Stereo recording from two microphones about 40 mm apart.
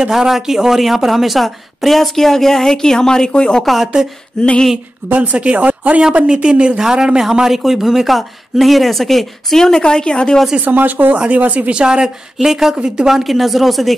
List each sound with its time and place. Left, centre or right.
0.1 s a woman's voice: centre; by 3.6 s left
3.6 s a woman's voice: centre
4.4 s a sound: left
5.1 s speech: right
6.2 s speech: right
6.8 s a woman's voice: centre; by 10.4 s left
10.6 s speech: right
11.1 s speech: right
11.7 s a woman's voice: right
13.1 s a woman's voice: centre